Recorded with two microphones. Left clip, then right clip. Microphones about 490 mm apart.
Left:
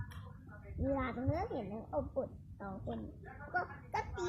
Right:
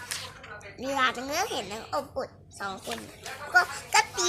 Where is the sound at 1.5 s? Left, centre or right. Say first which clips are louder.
Right 8 dB; centre.